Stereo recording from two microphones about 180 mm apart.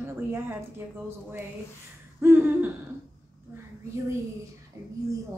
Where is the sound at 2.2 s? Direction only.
10° right (ahead or behind).